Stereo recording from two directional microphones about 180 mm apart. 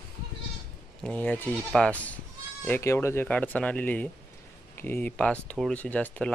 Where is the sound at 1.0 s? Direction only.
10° left (ahead or behind).